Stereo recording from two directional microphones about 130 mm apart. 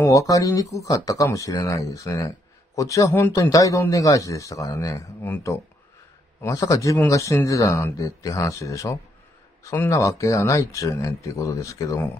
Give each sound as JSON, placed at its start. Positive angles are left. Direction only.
{"t": 0.0, "sound": "speech", "side_deg": 25}
{"t": 6.4, "sound": "speech", "side_deg": 25}